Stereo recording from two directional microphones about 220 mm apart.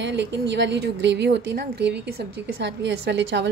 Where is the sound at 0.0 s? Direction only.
50° right (ahead or behind).